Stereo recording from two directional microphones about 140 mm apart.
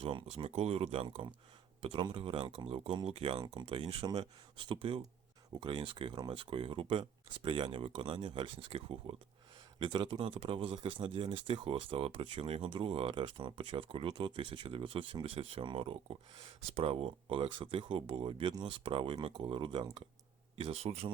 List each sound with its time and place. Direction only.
0.0 s speech: 40° right (ahead or behind)
3.4 s speech: 30° right (ahead or behind)